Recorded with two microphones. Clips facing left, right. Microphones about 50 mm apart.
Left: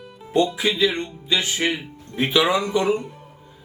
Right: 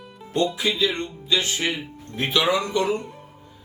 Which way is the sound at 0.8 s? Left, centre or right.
Left.